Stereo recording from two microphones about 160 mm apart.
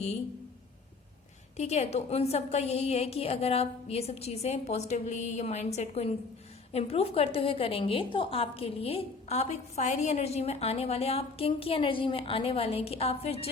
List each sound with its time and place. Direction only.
1.5 s a woman's voice: 45° left (ahead or behind)